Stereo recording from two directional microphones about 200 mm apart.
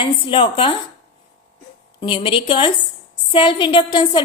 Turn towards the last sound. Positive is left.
turn(degrees=25)  # may be behind; listen again after turning